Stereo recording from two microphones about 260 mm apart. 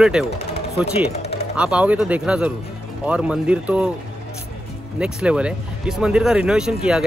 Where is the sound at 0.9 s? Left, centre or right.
Left.